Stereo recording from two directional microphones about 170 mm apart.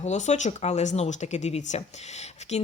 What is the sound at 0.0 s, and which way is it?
Speech, 45° left (ahead or behind).